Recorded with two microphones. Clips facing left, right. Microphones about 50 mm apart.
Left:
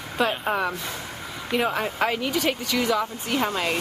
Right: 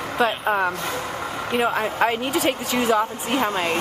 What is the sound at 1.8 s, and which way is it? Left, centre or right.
Speech, centre.